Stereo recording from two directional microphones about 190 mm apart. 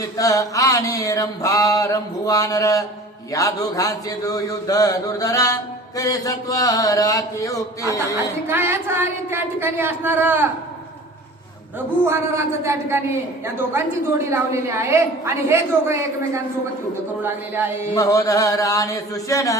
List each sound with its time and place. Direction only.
0.2 s mantra: 20° left (ahead or behind)
8.4 s a woman's voice: 10° right (ahead or behind)
12.0 s a woman's voice: 15° right (ahead or behind)
14.3 s a woman's voice: 15° right (ahead or behind)
17.9 s mantra: 15° left (ahead or behind)